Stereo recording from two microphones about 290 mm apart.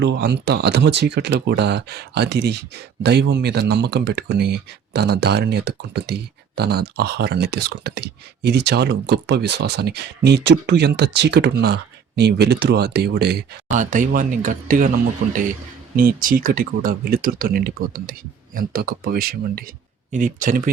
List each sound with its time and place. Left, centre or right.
0.0 s speech: right
16.0 s speech: right